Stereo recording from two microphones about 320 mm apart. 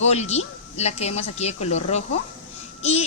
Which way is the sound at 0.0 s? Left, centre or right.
Left.